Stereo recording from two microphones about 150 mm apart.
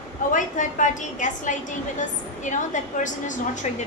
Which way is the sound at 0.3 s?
60° left (ahead or behind).